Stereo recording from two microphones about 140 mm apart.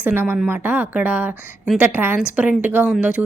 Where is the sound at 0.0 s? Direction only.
15° right (ahead or behind).